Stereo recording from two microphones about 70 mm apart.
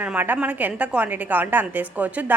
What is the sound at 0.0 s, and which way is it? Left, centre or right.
A woman's voice, right.